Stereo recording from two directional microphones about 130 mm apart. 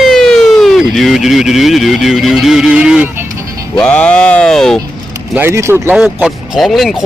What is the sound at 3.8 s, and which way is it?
Speech, 10° left (ahead or behind).